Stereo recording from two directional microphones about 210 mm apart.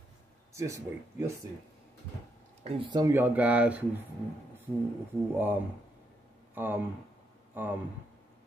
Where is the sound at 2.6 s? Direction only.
25° right (ahead or behind); by 4.1 s 5° right (ahead or behind).